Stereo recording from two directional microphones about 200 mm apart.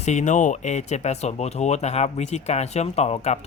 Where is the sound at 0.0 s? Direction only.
35° left (ahead or behind).